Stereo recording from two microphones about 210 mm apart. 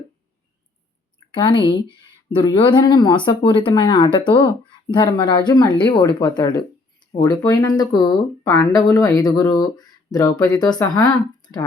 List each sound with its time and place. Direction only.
1.3 s speech: 20° left (ahead or behind)